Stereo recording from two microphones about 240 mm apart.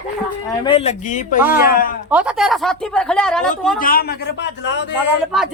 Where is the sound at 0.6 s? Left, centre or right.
Left.